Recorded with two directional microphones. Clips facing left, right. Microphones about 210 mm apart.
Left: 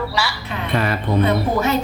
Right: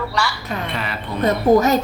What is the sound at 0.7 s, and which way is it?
Speech, 45° left (ahead or behind).